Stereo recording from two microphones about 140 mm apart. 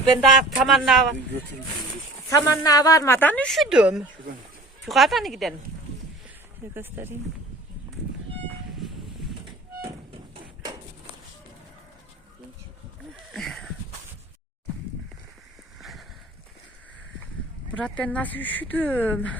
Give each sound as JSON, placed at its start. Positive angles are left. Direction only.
{"t": 0.3, "sound": "speech", "side_deg": 0}
{"t": 2.3, "sound": "a woman's voice", "side_deg": 25}
{"t": 6.7, "sound": "speech", "side_deg": -15}
{"t": 13.3, "sound": "sniff", "side_deg": 0}
{"t": 15.8, "sound": "a sound", "side_deg": 0}
{"t": 17.7, "sound": "a woman's voice", "side_deg": 10}